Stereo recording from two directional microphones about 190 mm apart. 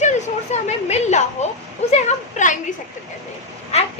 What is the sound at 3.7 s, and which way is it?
Speech, 35° left (ahead or behind).